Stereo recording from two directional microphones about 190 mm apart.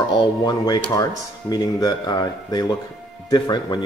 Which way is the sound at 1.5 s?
20° left (ahead or behind).